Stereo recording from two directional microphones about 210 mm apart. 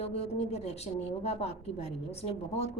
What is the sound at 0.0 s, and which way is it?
A woman's voice, 30° left (ahead or behind).